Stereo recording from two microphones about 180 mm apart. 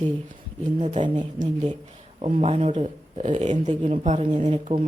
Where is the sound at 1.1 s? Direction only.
40° right (ahead or behind).